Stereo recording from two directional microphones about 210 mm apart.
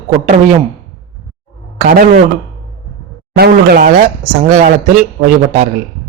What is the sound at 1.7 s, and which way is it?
Speech, 40° right (ahead or behind).